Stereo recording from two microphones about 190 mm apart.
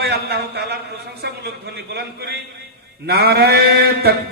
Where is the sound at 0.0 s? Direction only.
55° right (ahead or behind).